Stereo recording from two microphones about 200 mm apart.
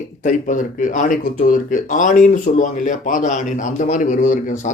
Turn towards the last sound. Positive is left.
turn(degrees=40)  # may be behind; listen again after turning